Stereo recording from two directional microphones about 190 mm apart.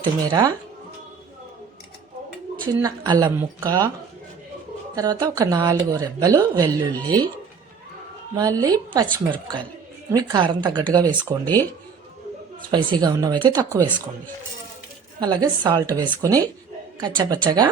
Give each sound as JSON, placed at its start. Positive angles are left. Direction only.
{"t": 0.0, "sound": "speech", "side_deg": -20}
{"t": 2.7, "sound": "speech", "side_deg": -20}
{"t": 4.9, "sound": "speech", "side_deg": -20}
{"t": 8.4, "sound": "speech", "side_deg": -20}
{"t": 10.1, "sound": "speech", "side_deg": -20}
{"t": 12.7, "sound": "speech", "side_deg": -20}
{"t": 15.2, "sound": "speech", "side_deg": -20}